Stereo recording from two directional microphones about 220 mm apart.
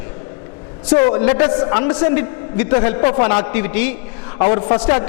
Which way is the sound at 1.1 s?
20° left (ahead or behind).